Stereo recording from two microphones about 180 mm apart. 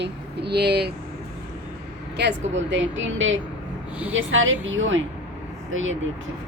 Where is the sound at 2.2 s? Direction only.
70° right (ahead or behind).